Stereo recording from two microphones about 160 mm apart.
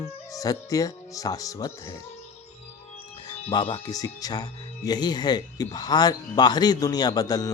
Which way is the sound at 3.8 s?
25° left (ahead or behind).